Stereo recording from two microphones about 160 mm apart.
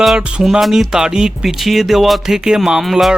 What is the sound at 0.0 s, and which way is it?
Speech, 5° right (ahead or behind).